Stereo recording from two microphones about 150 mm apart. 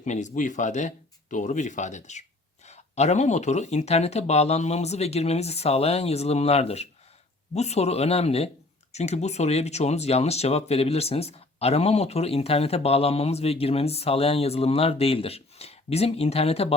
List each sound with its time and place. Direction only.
0.0 s speech: 55° left (ahead or behind)